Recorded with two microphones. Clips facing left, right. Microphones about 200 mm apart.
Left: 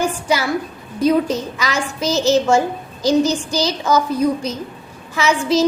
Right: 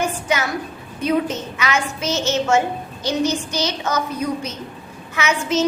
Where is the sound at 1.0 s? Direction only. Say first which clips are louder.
Left 4 dB; 35° left (ahead or behind).